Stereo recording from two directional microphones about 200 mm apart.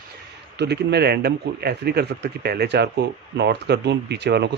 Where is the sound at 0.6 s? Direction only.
55° right (ahead or behind).